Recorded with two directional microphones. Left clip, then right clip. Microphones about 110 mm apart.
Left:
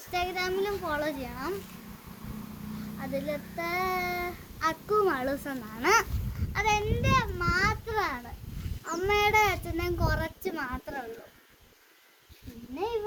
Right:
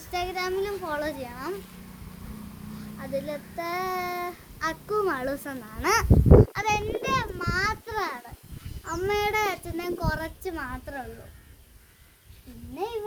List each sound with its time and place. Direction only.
0.1 s a child's voice: 35° right (ahead or behind)
3.0 s child singing: 30° right (ahead or behind)
8.8 s a child's voice: 10° right (ahead or behind)
12.7 s child singing: 20° right (ahead or behind)